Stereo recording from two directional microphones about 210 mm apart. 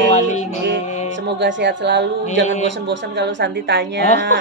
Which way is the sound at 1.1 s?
55° right (ahead or behind).